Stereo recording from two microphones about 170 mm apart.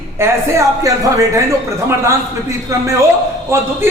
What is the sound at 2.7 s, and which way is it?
Speech, 15° right (ahead or behind).